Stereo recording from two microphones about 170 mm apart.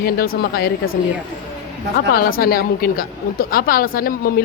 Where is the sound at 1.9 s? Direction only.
60° left (ahead or behind).